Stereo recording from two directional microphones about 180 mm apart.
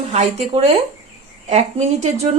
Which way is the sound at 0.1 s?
35° right (ahead or behind).